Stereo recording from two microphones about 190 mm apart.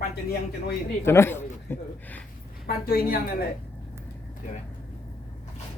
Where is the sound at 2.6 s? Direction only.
50° left (ahead or behind).